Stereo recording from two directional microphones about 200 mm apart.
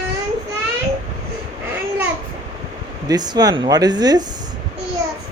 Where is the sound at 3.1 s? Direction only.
20° right (ahead or behind).